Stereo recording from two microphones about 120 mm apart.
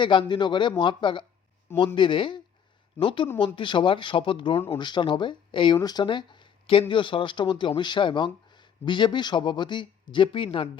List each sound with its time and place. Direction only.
0.0 s speech: 40° left (ahead or behind)